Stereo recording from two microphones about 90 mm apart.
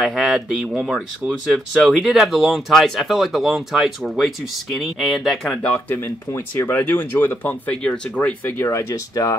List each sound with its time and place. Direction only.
0.0 s speech: 5° right (ahead or behind)
5.5 s speech: 15° left (ahead or behind)
8.2 s speech: 20° left (ahead or behind)
8.6 s speech: 35° left (ahead or behind)